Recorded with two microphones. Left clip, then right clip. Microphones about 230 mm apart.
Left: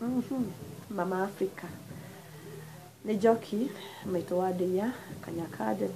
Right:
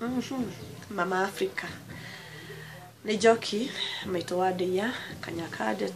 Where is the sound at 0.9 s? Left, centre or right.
Centre.